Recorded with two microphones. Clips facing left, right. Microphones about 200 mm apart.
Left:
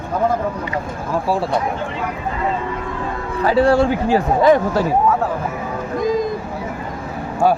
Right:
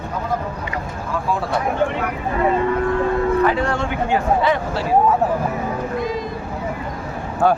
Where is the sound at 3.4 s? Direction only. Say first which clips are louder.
Left 6 dB; 35° left (ahead or behind).